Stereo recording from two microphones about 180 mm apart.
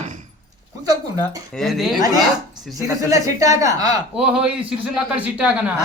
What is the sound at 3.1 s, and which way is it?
Speech, 20° right (ahead or behind).